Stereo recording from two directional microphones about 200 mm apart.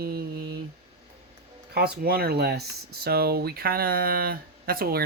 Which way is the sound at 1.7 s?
50° right (ahead or behind).